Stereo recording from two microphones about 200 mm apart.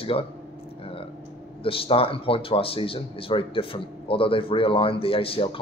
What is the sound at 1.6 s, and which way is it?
Speech, 25° left (ahead or behind).